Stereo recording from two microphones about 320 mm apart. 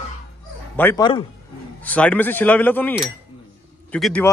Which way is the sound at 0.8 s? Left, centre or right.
Centre.